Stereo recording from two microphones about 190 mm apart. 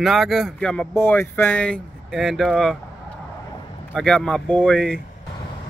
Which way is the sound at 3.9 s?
5° left (ahead or behind).